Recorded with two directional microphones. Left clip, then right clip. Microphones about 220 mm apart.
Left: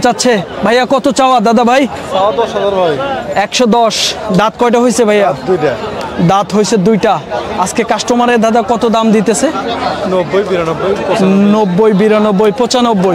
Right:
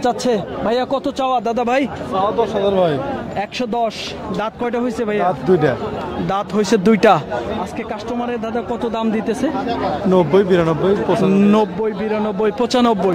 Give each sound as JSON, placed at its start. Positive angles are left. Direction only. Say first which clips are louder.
{"t": 0.0, "sound": "speech", "louder": "left 7 dB", "side_deg": 10}
{"t": 0.7, "sound": "speech", "louder": "left 10 dB", "side_deg": 20}
{"t": 3.3, "sound": "speech", "louder": "left 11 dB", "side_deg": 30}
{"t": 6.2, "sound": "speech", "louder": "left 10 dB", "side_deg": 10}
{"t": 6.6, "sound": "speech", "louder": "left 3 dB", "side_deg": -10}
{"t": 7.7, "sound": "speech", "louder": "left 12 dB", "side_deg": 45}
{"t": 8.9, "sound": "speech", "louder": "left 10 dB", "side_deg": 20}
{"t": 10.1, "sound": "speech", "louder": "even", "side_deg": -60}
{"t": 11.3, "sound": "speech", "louder": "left 4 dB", "side_deg": -10}
{"t": 11.8, "sound": "speech", "louder": "left 12 dB", "side_deg": 35}
{"t": 12.3, "sound": "speech", "louder": "left 9 dB", "side_deg": 10}
{"t": 12.5, "sound": "a man's voice", "louder": "left 5 dB", "side_deg": 0}